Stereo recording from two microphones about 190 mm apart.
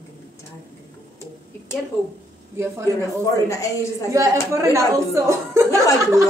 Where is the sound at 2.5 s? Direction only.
15° right (ahead or behind).